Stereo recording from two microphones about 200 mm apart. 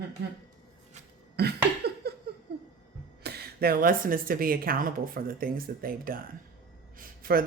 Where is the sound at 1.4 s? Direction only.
55° right (ahead or behind).